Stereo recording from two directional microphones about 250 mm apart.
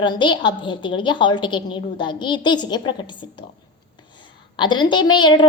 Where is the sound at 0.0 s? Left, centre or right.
Centre.